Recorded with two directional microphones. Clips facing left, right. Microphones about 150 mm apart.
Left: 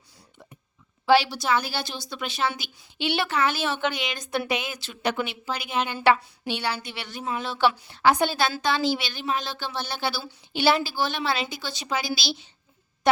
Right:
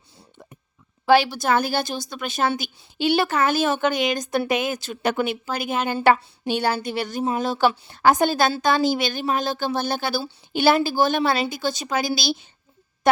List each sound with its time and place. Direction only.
1.0 s a woman's voice: 50° right (ahead or behind)